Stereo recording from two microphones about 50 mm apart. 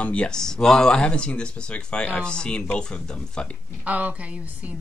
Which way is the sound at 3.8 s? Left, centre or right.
Right.